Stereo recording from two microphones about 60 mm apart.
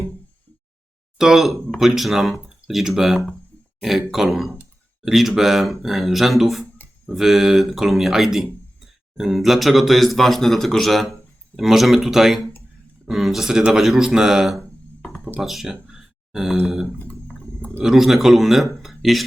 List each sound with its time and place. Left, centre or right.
1.2 s speech: centre
17.0 s a sound: left
17.8 s speech: centre